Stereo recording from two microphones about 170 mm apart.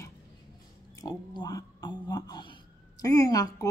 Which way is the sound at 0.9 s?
25° left (ahead or behind).